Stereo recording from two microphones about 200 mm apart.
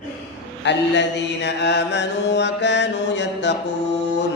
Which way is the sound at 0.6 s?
60° left (ahead or behind).